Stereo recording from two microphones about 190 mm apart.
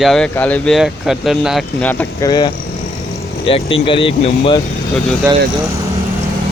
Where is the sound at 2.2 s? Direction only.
20° left (ahead or behind).